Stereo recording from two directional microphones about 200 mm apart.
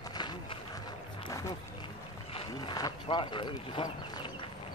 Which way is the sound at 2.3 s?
20° left (ahead or behind).